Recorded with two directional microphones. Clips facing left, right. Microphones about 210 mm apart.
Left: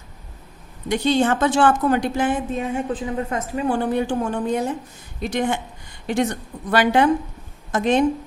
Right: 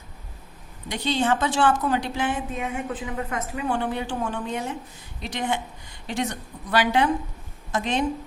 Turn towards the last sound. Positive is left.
turn(degrees=50)  # may be behind; listen again after turning